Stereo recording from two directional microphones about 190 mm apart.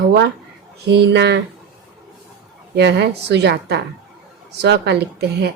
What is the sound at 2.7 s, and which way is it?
Speech, 60° right (ahead or behind).